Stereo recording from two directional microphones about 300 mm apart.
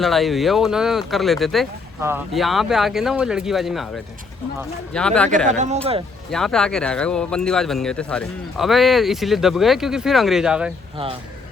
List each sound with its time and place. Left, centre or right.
0.0 s speech: centre
4.9 s speech: centre
5.5 s speech: right
6.3 s speech: centre